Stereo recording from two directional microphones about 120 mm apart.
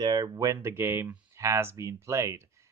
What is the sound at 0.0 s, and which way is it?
Speech, 35° right (ahead or behind).